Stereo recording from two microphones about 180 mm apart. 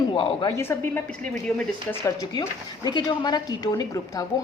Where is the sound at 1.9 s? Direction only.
20° left (ahead or behind).